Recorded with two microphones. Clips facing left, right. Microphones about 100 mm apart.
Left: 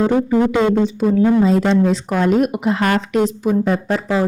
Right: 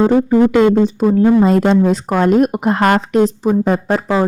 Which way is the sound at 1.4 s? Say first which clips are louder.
Right 3 dB; 50° right (ahead or behind).